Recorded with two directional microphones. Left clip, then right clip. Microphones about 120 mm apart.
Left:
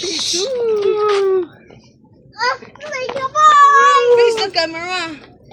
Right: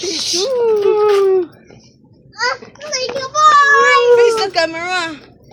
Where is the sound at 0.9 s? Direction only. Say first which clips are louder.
Right 3 dB; 40° right (ahead or behind).